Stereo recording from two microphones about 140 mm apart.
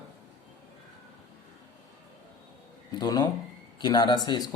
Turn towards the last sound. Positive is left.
turn(degrees=30)  # may be behind; listen again after turning